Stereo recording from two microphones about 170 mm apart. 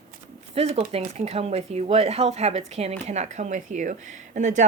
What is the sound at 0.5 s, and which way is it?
A woman's voice, 35° right (ahead or behind).